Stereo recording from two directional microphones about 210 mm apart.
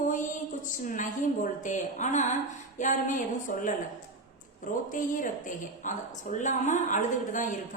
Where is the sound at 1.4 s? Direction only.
35° left (ahead or behind).